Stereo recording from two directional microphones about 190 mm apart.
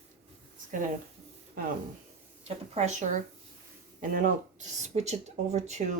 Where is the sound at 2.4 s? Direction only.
35° right (ahead or behind).